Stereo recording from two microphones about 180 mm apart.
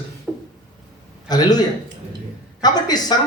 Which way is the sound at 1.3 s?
20° left (ahead or behind).